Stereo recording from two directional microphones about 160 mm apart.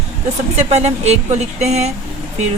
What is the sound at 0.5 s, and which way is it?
Speech, 45° right (ahead or behind).